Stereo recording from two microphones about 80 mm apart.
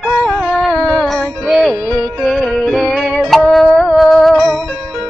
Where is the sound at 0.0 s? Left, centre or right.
Centre.